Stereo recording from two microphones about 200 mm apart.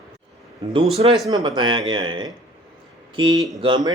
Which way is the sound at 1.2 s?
20° right (ahead or behind).